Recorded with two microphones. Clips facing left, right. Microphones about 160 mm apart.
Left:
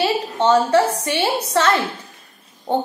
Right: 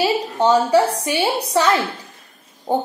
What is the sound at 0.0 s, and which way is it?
A woman's voice, 10° right (ahead or behind).